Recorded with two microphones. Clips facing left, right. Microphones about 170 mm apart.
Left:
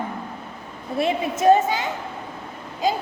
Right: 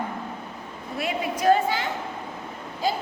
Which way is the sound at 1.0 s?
25° left (ahead or behind).